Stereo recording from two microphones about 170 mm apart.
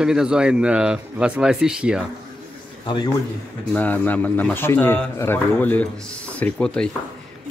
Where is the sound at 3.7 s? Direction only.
10° left (ahead or behind).